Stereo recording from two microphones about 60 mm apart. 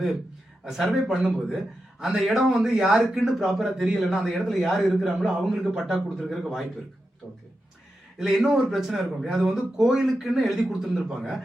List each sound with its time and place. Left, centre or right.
0.6 s a man's voice: centre
1.1 s a man's voice: centre
8.2 s a man's voice: centre